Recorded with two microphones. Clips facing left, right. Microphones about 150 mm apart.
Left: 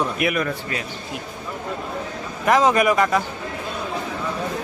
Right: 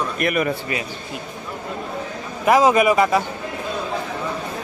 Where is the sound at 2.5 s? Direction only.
10° right (ahead or behind).